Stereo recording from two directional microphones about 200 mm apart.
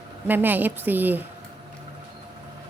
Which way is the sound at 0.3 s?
10° right (ahead or behind).